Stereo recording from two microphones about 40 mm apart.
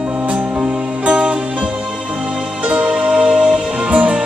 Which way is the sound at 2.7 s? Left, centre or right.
Right.